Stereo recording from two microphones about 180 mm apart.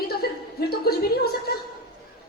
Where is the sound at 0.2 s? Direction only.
60° left (ahead or behind).